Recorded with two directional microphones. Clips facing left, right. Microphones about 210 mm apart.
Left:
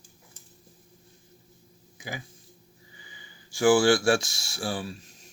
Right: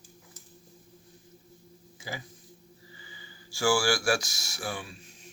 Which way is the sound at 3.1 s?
20° left (ahead or behind).